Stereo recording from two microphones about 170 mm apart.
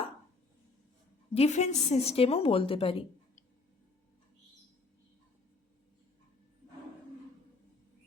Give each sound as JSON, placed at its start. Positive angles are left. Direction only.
{"t": 1.3, "sound": "a woman's voice", "side_deg": 40}